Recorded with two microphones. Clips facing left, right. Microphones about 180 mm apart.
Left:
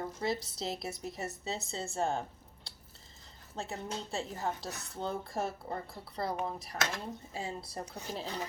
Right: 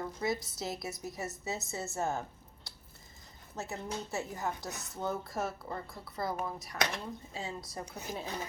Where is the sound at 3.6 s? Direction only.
30° left (ahead or behind).